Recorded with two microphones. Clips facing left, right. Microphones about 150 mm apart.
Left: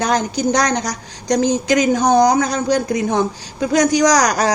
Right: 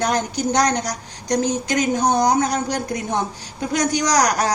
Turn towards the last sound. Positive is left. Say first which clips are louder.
# left 4 dB
turn(degrees=90)